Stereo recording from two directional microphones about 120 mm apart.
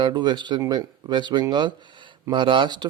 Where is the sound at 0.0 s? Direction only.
40° right (ahead or behind).